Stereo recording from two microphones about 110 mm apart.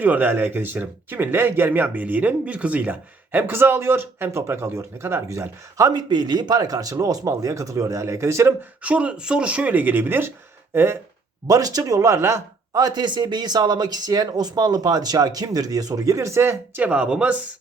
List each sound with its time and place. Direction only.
0.0 s speech: 15° right (ahead or behind)
8.8 s speech: 10° right (ahead or behind)
11.4 s speech: 35° right (ahead or behind)
12.7 s speech: 40° right (ahead or behind); by 17.3 s 10° right (ahead or behind)